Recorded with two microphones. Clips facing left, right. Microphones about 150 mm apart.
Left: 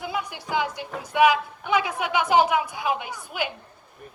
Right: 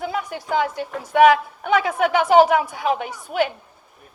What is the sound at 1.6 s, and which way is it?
A woman's voice, 50° right (ahead or behind).